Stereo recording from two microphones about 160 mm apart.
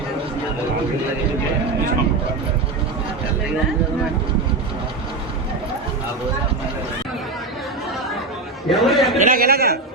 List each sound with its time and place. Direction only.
8.7 s a man's voice: centre (ahead or behind)
9.1 s a man's voice: 55° right (ahead or behind); by 9.7 s 70° right (ahead or behind)